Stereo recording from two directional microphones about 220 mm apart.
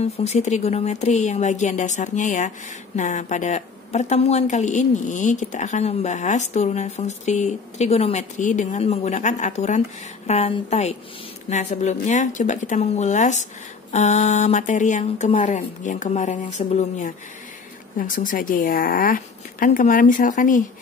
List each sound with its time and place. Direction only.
0.0 s a woman's voice: 30° left (ahead or behind)